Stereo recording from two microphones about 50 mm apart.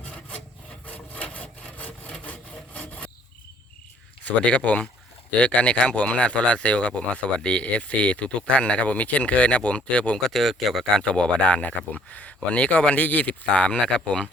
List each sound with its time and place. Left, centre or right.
0.9 s wood: left
4.5 s speech: left
10.2 s speech: centre
10.9 s speech: centre